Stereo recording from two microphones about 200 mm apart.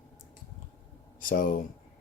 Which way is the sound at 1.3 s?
45° left (ahead or behind).